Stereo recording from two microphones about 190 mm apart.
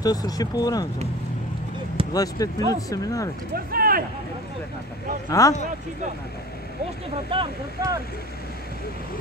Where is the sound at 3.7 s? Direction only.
50° right (ahead or behind).